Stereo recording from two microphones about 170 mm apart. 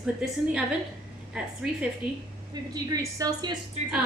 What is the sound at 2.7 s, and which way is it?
Speech, 20° right (ahead or behind).